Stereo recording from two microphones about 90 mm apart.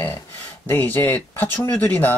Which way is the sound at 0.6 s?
20° left (ahead or behind).